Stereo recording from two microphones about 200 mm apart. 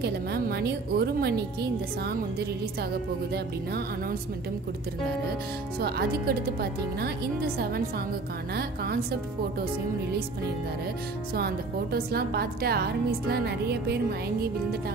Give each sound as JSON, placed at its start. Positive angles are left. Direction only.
{"t": 0.0, "sound": "a woman's voice", "side_deg": -55}
{"t": 5.8, "sound": "a woman's voice", "side_deg": -50}
{"t": 8.5, "sound": "a woman's voice", "side_deg": -50}
{"t": 11.3, "sound": "a woman's voice", "side_deg": -50}